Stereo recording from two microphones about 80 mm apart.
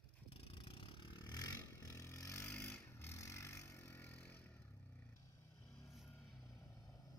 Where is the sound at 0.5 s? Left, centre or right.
Left.